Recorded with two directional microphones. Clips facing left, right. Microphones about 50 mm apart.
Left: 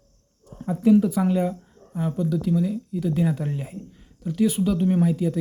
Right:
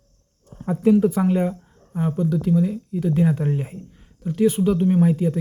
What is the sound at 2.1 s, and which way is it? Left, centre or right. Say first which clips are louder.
Speech: right 3 dB; right.